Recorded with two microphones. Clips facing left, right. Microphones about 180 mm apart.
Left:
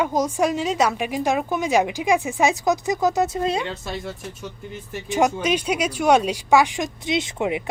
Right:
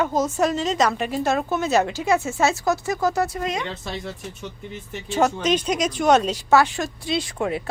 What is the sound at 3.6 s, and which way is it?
Speech, centre (ahead or behind).